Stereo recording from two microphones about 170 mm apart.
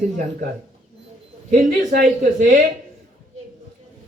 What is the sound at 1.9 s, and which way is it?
Speech, 55° right (ahead or behind).